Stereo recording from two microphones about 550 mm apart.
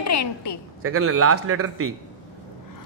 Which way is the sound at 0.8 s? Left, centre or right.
Right.